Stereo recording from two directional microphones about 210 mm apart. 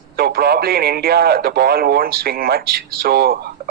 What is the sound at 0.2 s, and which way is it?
A man's voice, 45° right (ahead or behind).